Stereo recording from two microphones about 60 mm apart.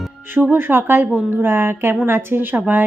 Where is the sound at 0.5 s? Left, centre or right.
Right.